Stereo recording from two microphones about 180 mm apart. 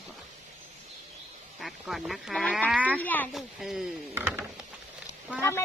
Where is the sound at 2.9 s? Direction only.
10° left (ahead or behind).